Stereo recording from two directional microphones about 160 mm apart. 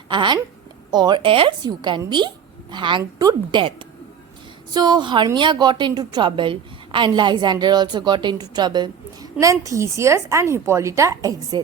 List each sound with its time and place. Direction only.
0.1 s a woman's voice: 30° right (ahead or behind)